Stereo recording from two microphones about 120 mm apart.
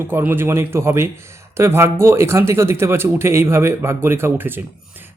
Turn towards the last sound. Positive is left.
turn(degrees=-20)  # may be behind; listen again after turning